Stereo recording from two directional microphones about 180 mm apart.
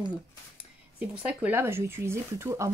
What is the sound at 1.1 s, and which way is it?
Speech, 5° right (ahead or behind).